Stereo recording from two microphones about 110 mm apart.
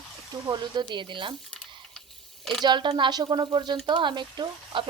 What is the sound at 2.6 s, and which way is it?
Speech, 45° right (ahead or behind).